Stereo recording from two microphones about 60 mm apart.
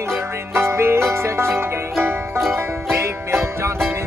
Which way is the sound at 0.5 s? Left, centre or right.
Right.